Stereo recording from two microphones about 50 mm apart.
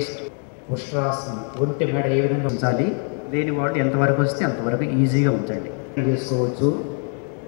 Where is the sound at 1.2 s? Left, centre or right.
Centre.